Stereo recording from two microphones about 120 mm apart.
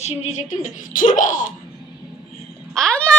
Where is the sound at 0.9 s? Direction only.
90° left.